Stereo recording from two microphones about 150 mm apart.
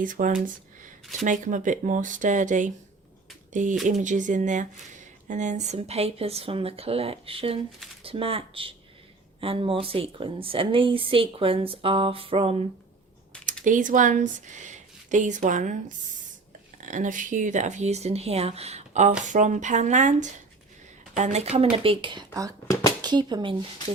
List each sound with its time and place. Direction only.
0.0 s a woman's voice: 65° right (ahead or behind); by 12.6 s 40° right (ahead or behind)
13.7 s speech: 60° right (ahead or behind)
16.8 s a woman's voice: 60° right (ahead or behind); by 23.6 s 30° right (ahead or behind)